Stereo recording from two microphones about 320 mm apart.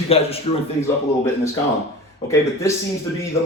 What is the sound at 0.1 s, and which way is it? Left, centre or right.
Speech, centre.